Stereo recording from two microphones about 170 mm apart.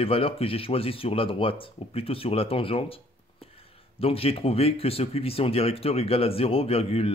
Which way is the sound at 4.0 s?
35° left (ahead or behind).